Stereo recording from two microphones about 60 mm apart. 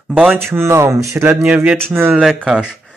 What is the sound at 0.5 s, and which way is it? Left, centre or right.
Speech, right.